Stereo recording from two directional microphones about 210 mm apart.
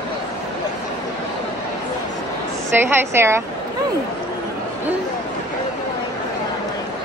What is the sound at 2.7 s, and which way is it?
Speech, 10° right (ahead or behind).